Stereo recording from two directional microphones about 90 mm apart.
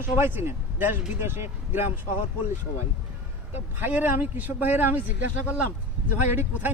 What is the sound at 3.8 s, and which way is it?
Speech, 20° right (ahead or behind).